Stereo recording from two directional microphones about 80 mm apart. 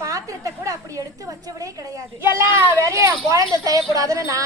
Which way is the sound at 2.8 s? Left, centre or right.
Right.